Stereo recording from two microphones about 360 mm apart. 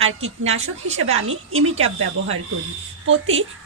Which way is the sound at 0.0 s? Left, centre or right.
Right.